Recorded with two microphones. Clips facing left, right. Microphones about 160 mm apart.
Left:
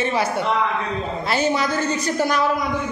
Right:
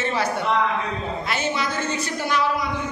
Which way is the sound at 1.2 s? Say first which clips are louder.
Left 6 dB; 35° left (ahead or behind).